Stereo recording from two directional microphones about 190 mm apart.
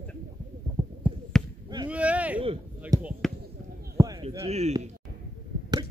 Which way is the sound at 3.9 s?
20° right (ahead or behind).